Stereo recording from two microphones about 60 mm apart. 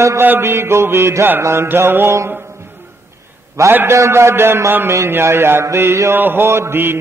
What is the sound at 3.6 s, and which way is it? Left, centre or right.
Speech, right.